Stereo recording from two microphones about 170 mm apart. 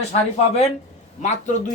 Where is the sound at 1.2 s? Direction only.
45° left (ahead or behind).